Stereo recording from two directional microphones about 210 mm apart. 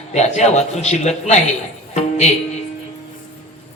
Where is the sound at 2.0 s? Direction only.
30° left (ahead or behind).